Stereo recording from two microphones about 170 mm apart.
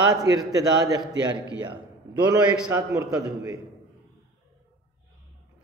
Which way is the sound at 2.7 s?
20° right (ahead or behind).